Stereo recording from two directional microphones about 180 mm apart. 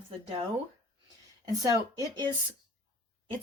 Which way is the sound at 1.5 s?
20° right (ahead or behind).